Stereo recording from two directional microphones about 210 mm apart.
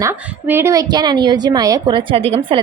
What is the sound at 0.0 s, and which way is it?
A woman's voice, 10° right (ahead or behind).